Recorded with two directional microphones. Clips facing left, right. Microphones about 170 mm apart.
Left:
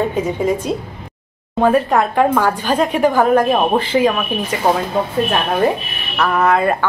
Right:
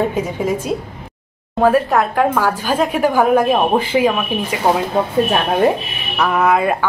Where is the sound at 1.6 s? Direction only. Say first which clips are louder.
Even; centre (ahead or behind).